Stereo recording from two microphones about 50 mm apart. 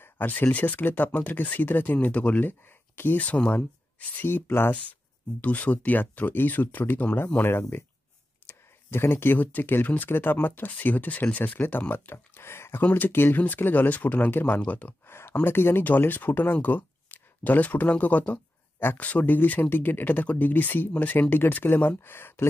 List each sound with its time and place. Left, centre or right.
0.0 s a sound: left
0.5 s speech: left
2.4 s speech: left
3.2 s speech: left
4.5 s speech: left
5.4 s speech: left
7.4 s speech: left
11.9 s speech: left
12.8 s speech: left
15.0 s speech: left
21.6 s speech: left